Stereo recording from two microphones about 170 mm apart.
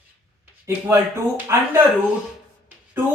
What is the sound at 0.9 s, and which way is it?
Speech, 15° right (ahead or behind).